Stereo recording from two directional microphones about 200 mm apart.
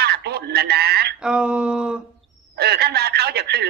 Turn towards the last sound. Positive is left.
turn(degrees=-55)  # may be behind; listen again after turning